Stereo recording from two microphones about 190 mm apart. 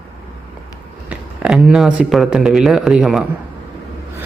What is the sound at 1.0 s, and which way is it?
Speech, 5° right (ahead or behind).